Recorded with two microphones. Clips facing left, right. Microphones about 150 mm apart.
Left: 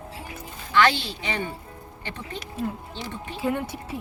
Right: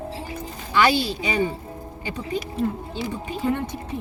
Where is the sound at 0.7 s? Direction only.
10° right (ahead or behind).